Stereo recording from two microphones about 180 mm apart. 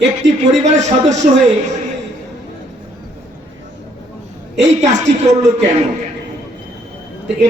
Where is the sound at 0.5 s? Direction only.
40° right (ahead or behind).